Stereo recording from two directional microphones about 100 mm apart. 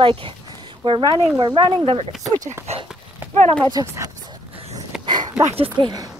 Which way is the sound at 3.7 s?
30° right (ahead or behind).